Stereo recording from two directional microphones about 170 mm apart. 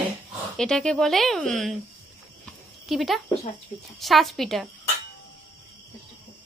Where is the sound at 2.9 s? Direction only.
Centre (ahead or behind).